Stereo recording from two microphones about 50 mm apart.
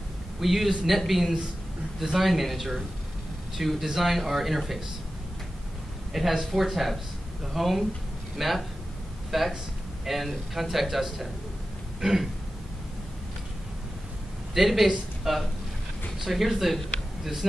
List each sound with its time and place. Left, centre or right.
0.4 s speech: centre
6.1 s speech: centre
12.0 s throat clearing: centre
14.5 s speech: centre
15.3 s throat clearing: centre
16.2 s speech: centre